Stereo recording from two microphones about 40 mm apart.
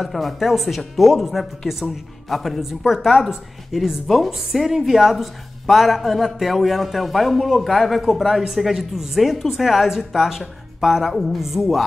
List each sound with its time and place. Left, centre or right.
0.0 s a man's voice: centre